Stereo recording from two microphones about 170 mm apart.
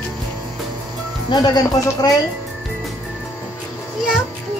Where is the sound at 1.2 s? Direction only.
20° left (ahead or behind).